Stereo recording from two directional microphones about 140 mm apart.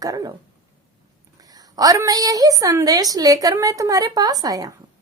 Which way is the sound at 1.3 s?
25° right (ahead or behind).